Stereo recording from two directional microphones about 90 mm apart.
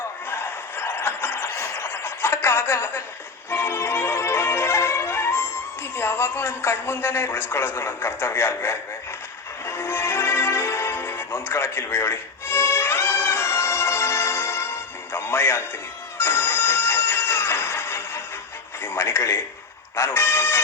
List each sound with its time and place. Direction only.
0.3 s a sound: 25° left (ahead or behind)
3.5 s music: 25° left (ahead or behind)
6.0 s a man's voice: 30° left (ahead or behind)
9.6 s music: 30° left (ahead or behind)
18.8 s speech: 25° left (ahead or behind)